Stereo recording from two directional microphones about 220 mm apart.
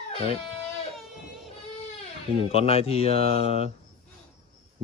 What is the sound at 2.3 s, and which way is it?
Speech, 25° left (ahead or behind).